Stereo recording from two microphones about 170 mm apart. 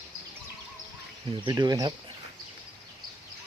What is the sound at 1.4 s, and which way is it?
Speech, 25° right (ahead or behind).